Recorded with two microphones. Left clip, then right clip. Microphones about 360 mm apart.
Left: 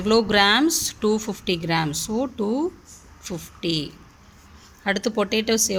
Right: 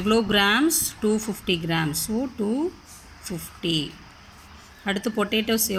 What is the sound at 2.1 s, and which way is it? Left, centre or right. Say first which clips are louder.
Speech: left 3 dB; left.